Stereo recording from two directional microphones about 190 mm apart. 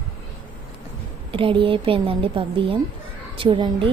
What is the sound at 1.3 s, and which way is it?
Speech, 25° right (ahead or behind).